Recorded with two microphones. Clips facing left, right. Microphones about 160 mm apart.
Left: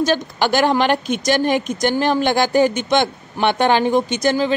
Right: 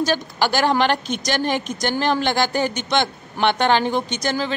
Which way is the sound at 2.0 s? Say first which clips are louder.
Left 2 dB; 10° left (ahead or behind).